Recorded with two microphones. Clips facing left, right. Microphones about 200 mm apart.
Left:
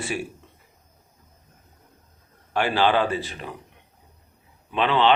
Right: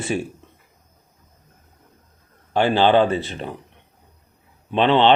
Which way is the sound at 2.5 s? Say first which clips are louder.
Right 5 dB; 25° right (ahead or behind).